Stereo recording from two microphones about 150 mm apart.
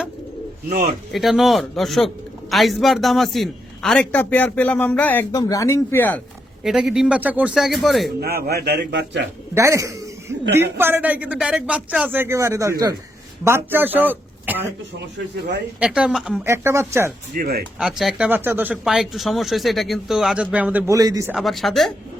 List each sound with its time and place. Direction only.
1.1 s a man's voice: centre (ahead or behind)
5.3 s speech: 25° left (ahead or behind)
6.6 s a man's voice: centre (ahead or behind)
8.2 s a man's voice: 90° right
9.6 s a man's voice: 20° right (ahead or behind)
15.8 s a man's voice: 5° right (ahead or behind)
16.4 s a man's voice: 15° right (ahead or behind)
17.3 s a man's voice: 90° right
17.7 s a man's voice: 5° right (ahead or behind)
18.3 s a man's voice: 15° right (ahead or behind)
20.9 s a man's voice: 25° right (ahead or behind)
21.3 s a man's voice: centre (ahead or behind)